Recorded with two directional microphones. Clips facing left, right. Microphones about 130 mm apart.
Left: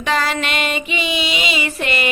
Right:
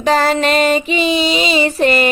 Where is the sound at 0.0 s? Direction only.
35° right (ahead or behind).